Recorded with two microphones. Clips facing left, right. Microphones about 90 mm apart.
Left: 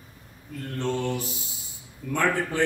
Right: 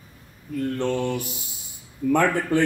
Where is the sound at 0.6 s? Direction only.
60° right (ahead or behind).